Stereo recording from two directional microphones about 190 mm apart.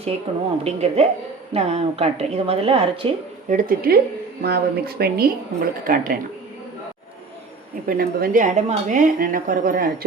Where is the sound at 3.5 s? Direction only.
50° right (ahead or behind).